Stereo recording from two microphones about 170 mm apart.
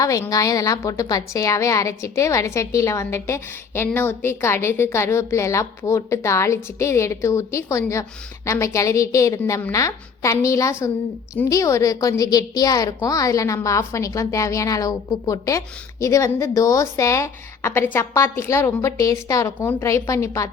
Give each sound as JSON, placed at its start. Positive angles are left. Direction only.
{"t": 0.0, "sound": "a woman's voice", "side_deg": 20}